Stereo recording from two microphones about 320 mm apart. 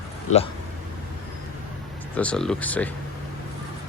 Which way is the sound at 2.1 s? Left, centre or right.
Centre.